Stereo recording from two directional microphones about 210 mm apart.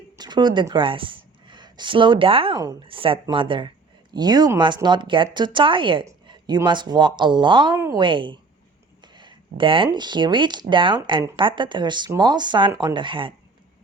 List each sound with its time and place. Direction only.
0.2 s a woman's voice: 20° right (ahead or behind)